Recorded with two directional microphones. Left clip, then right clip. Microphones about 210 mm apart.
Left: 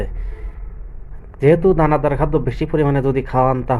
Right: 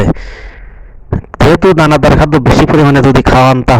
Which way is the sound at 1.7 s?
50° right (ahead or behind).